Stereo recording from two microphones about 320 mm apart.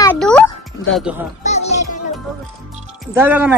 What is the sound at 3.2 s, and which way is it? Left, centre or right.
Speech, centre.